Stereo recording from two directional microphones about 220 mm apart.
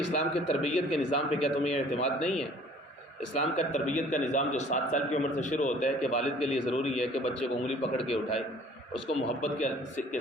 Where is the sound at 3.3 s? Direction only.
30° left (ahead or behind).